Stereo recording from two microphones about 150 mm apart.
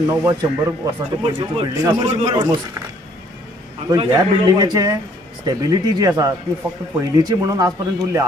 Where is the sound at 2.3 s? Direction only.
25° right (ahead or behind).